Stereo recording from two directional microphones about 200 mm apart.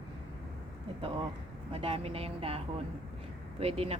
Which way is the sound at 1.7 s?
30° right (ahead or behind).